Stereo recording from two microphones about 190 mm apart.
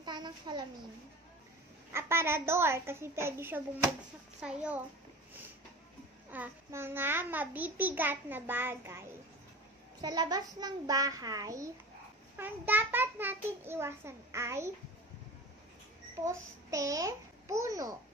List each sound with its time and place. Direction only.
0.0 s a sound: 25° right (ahead or behind)
1.9 s a child's voice: 15° right (ahead or behind)
6.3 s a child's voice: 10° right (ahead or behind)
10.0 s a child's voice: 20° right (ahead or behind)
16.3 s a child's voice: 15° right (ahead or behind)